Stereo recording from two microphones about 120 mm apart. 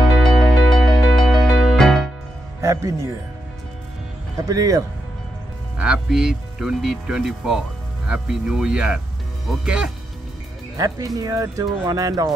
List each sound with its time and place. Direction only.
0.2 s music: 5° left (ahead or behind)
2.6 s speech: 25° right (ahead or behind)
4.4 s speech: 30° right (ahead or behind)
5.8 s speech: 5° right (ahead or behind)
10.8 s speech: 30° right (ahead or behind)